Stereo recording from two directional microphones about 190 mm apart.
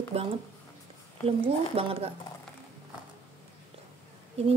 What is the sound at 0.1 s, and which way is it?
Speech, 30° right (ahead or behind).